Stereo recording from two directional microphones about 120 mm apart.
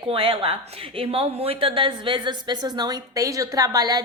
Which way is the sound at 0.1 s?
50° right (ahead or behind).